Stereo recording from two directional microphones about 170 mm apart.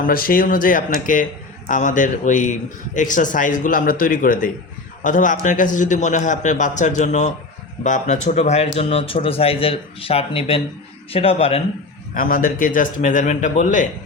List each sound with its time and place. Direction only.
0.0 s speech: 55° left (ahead or behind); by 11.6 s 35° left (ahead or behind)
12.1 s speech: 55° left (ahead or behind)